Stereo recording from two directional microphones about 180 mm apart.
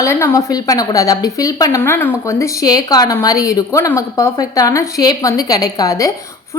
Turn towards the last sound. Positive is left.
turn(degrees=20)  # may be behind; listen again after turning